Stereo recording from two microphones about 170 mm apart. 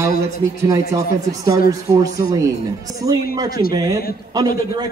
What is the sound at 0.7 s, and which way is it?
A man's voice, 20° right (ahead or behind).